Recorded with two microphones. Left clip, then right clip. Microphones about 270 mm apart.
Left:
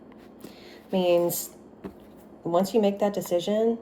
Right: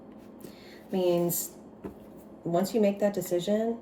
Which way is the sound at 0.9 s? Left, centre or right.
Centre.